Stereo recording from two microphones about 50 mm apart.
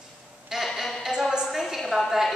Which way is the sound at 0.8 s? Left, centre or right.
Centre.